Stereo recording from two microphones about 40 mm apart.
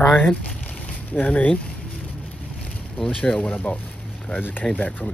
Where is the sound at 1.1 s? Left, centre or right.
Left.